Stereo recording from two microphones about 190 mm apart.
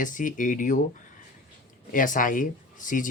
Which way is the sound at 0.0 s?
45° left (ahead or behind).